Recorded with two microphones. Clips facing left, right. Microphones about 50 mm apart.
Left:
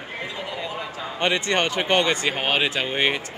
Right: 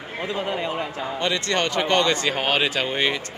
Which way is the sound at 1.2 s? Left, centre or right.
Left.